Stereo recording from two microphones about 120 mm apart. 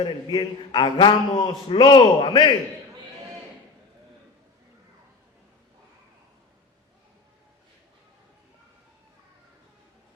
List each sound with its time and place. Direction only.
0.0 s a man's voice: 40° left (ahead or behind)